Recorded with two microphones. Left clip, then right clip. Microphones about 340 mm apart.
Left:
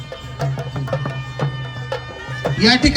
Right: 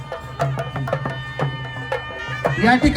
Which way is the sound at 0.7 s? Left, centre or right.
Right.